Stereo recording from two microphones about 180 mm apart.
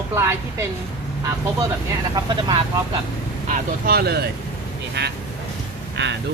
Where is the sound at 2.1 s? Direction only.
25° right (ahead or behind).